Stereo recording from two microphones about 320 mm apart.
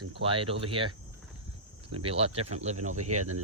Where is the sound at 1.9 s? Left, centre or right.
Centre.